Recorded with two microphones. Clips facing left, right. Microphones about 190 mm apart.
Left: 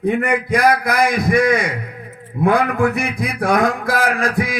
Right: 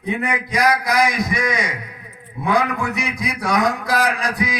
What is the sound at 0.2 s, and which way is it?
A man's voice, 55° left (ahead or behind).